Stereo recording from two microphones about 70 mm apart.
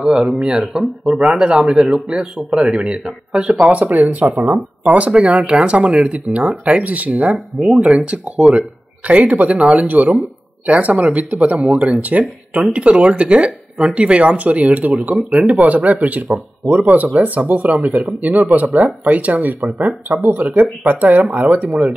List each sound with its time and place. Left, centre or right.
0.0 s speech: centre; by 7.1 s right
7.3 s speech: centre
7.8 s speech: centre